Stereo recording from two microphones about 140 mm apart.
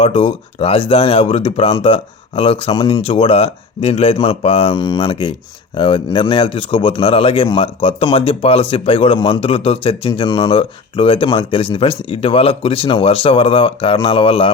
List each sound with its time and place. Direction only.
0.0 s speech: 45° left (ahead or behind)